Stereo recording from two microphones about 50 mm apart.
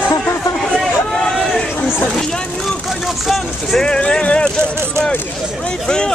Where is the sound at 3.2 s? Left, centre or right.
Centre.